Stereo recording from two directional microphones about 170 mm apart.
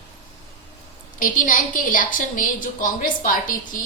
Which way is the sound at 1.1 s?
55° left (ahead or behind).